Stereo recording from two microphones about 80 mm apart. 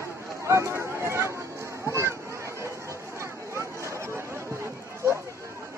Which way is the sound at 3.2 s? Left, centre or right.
Right.